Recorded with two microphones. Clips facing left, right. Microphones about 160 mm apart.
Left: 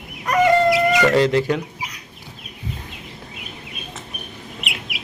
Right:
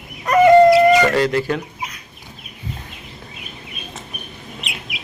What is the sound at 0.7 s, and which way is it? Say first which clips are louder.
Speech: right 4 dB; 20° left (ahead or behind).